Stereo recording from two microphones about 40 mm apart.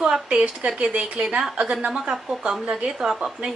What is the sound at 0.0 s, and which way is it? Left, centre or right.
Speech, right.